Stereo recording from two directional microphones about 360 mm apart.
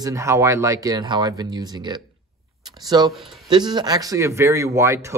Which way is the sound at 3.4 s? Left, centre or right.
Centre.